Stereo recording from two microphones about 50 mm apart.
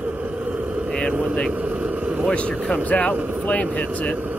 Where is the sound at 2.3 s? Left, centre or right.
Left.